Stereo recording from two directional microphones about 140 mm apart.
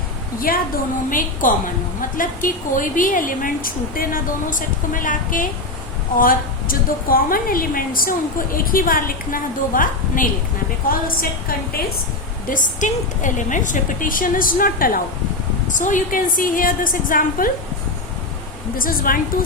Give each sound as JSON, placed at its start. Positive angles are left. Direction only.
{"t": 0.3, "sound": "a woman's voice", "side_deg": 90}
{"t": 1.1, "sound": "a woman's voice", "side_deg": 75}
{"t": 6.1, "sound": "a woman's voice", "side_deg": 90}
{"t": 10.8, "sound": "a woman's voice", "side_deg": 90}
{"t": 12.5, "sound": "a woman's voice", "side_deg": 65}
{"t": 15.7, "sound": "a woman's voice", "side_deg": 65}
{"t": 18.8, "sound": "a woman's voice", "side_deg": 90}